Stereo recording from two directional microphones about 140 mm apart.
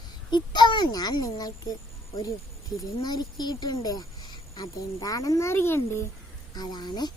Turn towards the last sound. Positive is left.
turn(degrees=30)  # may be behind; listen again after turning